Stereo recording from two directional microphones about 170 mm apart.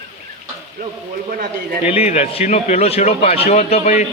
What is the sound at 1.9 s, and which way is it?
Speech, 35° left (ahead or behind).